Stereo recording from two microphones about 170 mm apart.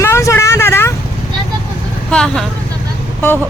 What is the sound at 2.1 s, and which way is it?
Speech, 5° left (ahead or behind).